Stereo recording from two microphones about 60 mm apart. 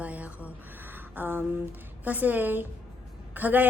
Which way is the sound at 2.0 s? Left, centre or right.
Right.